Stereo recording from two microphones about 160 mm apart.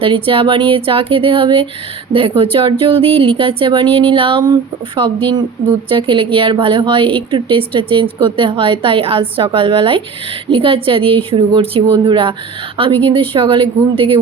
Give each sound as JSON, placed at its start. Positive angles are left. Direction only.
{"t": 0.0, "sound": "a woman's voice", "side_deg": -35}